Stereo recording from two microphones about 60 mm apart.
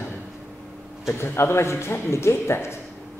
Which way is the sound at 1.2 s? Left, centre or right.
Left.